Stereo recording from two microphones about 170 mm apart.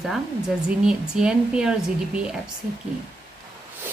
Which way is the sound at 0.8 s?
5° right (ahead or behind).